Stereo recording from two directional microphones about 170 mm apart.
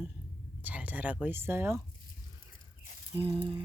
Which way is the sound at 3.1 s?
35° right (ahead or behind).